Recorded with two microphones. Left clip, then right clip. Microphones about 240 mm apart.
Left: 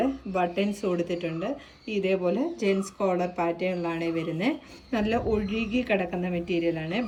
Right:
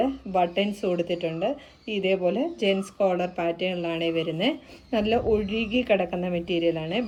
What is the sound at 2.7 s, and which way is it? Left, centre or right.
Speech, right.